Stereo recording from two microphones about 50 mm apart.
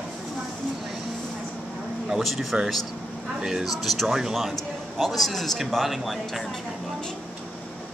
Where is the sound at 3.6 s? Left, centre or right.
Centre.